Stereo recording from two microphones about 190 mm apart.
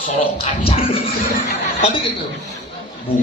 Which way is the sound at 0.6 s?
30° left (ahead or behind).